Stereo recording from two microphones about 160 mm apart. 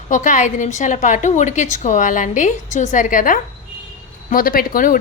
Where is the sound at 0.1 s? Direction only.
50° left (ahead or behind).